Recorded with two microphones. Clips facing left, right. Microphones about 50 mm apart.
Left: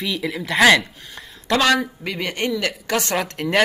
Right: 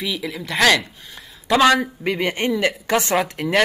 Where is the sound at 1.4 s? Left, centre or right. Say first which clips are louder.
Right 3 dB; centre.